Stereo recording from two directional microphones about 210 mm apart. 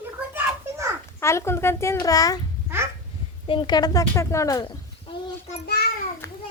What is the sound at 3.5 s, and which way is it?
Speech, 20° left (ahead or behind).